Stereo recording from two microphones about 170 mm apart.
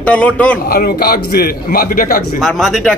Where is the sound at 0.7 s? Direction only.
65° left (ahead or behind).